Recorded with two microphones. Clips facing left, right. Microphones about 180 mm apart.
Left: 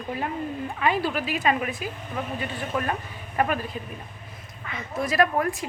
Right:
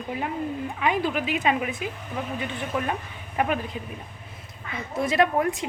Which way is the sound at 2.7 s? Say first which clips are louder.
Left 1 dB; 10° right (ahead or behind).